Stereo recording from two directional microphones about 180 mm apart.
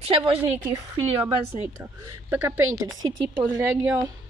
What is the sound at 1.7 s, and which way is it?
Speech, 10° right (ahead or behind).